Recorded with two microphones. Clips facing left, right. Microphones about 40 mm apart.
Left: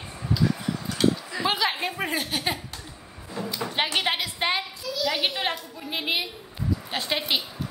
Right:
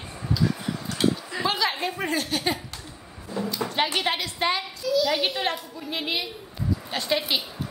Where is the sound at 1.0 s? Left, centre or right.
Centre.